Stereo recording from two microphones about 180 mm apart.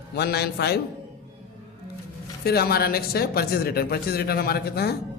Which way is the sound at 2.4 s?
60° left (ahead or behind).